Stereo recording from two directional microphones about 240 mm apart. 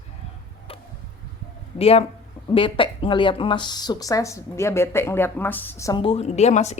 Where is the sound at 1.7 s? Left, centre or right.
Left.